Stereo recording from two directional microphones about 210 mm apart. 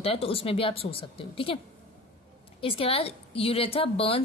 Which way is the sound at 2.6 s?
25° left (ahead or behind).